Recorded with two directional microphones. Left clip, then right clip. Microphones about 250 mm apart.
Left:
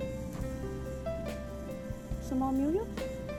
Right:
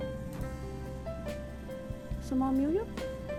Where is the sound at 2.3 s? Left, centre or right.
Centre.